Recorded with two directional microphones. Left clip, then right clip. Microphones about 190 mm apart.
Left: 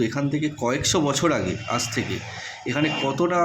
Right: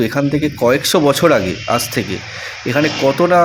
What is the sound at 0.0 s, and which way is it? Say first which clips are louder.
A man's voice: right 8 dB; 45° right (ahead or behind).